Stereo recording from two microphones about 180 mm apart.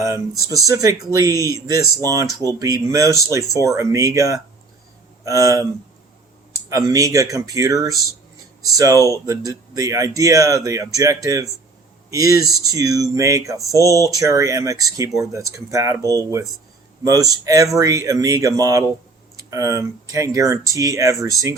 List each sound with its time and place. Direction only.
0.0 s speech: 20° right (ahead or behind)
13.7 s speech: 15° left (ahead or behind)
14.1 s speech: 20° right (ahead or behind)